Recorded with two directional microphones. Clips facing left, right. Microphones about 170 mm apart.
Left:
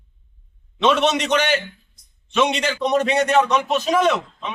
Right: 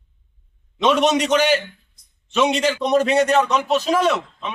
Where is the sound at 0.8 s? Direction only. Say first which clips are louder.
Right 1 dB; 10° right (ahead or behind).